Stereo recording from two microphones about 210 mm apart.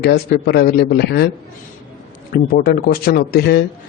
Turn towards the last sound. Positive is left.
turn(degrees=50)  # may be behind; listen again after turning